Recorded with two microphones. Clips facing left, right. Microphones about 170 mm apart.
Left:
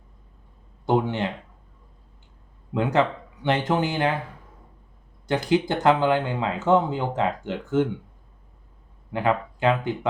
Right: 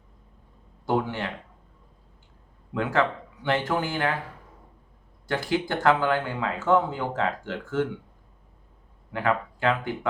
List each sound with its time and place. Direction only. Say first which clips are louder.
0.9 s speech: left 4 dB; 20° left (ahead or behind)
2.7 s speech: left 3 dB; 20° left (ahead or behind)
5.3 s speech: left 4 dB; 20° left (ahead or behind)
9.1 s speech: left 2 dB; 20° left (ahead or behind)